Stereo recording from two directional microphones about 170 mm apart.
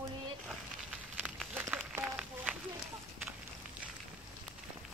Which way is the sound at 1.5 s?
10° right (ahead or behind).